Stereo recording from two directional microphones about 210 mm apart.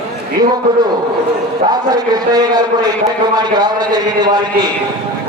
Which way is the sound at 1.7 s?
20° right (ahead or behind).